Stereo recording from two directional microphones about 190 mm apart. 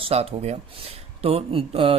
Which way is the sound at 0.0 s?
30° right (ahead or behind).